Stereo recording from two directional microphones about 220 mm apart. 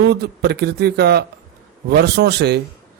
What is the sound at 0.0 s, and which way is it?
A man's voice, 50° right (ahead or behind).